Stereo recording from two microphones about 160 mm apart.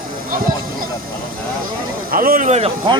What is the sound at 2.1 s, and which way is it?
Speech, 65° right (ahead or behind).